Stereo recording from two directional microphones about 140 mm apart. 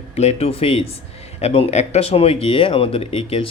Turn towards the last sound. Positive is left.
turn(degrees=45)  # may be behind; listen again after turning